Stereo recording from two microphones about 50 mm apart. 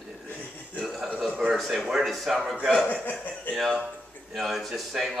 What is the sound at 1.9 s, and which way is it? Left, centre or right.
Speech, centre.